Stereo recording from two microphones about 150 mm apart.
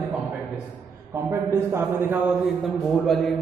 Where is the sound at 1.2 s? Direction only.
15° right (ahead or behind).